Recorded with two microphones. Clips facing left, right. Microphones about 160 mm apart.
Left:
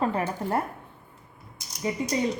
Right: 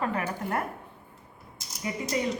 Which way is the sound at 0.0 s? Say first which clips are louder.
Left 3 dB; 30° left (ahead or behind).